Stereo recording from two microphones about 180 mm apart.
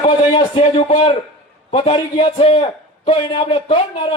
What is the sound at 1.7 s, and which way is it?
A man's voice, 30° left (ahead or behind).